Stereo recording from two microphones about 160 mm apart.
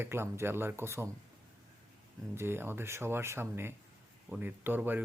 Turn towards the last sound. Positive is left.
turn(degrees=-10)  # may be behind; listen again after turning